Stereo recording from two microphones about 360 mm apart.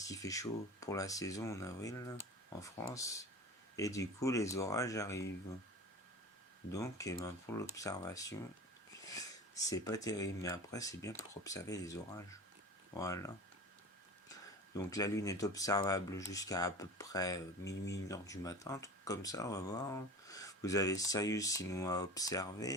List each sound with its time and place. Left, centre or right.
0.0 s speech: centre
6.7 s speech: centre
17.7 s speech: left
18.1 s speech: centre